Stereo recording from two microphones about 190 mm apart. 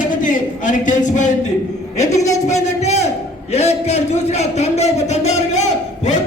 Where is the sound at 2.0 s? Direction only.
15° left (ahead or behind).